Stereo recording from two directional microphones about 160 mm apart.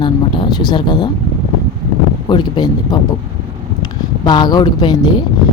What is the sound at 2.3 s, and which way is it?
Speech, 25° left (ahead or behind).